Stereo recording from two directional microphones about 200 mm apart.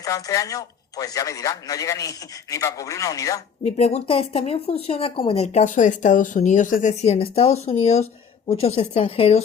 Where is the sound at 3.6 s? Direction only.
35° left (ahead or behind).